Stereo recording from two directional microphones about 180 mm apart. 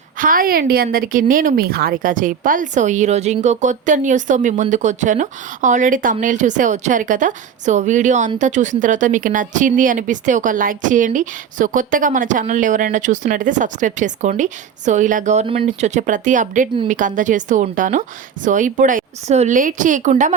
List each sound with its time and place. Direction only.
0.2 s a woman's voice: 50° right (ahead or behind)